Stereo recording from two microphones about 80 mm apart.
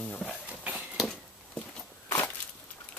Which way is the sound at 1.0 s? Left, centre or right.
Centre.